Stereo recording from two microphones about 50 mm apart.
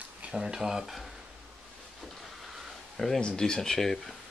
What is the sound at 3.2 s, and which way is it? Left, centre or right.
Speech, centre.